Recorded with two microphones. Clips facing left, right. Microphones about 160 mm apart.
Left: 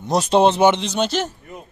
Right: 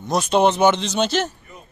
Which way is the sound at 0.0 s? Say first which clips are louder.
Left 2 dB; 30° left (ahead or behind).